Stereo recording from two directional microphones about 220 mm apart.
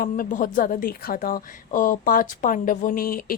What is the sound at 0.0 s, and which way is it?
A woman's voice, 40° left (ahead or behind).